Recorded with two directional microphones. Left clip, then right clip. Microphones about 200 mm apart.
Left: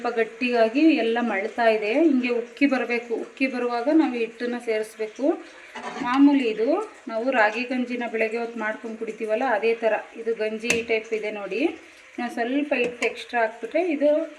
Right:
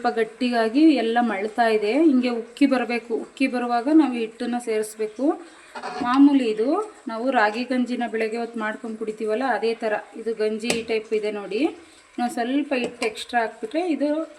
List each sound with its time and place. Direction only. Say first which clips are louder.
0.0 s a woman's voice: right 1 dB; 55° right (ahead or behind)
6.1 s a woman's voice: right 1 dB; 60° right (ahead or behind)